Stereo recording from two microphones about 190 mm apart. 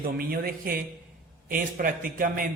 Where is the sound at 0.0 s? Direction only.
50° right (ahead or behind).